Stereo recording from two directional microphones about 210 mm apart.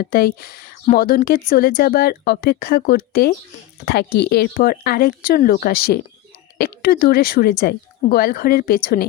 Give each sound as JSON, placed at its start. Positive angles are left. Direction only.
{"t": 0.0, "sound": "a woman's voice", "side_deg": 45}